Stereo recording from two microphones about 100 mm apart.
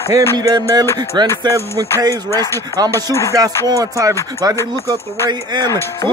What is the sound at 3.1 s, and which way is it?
Speech, 35° right (ahead or behind).